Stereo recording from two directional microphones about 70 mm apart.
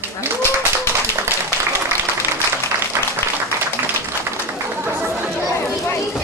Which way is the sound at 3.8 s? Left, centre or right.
Right.